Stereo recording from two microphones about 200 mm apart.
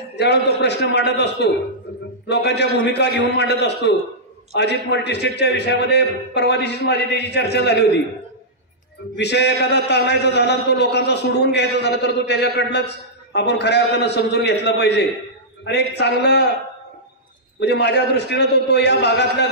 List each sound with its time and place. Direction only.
0.1 s a man's voice: 55° left (ahead or behind)
9.2 s a man's voice: 60° left (ahead or behind)
17.6 s a man's voice: 55° left (ahead or behind)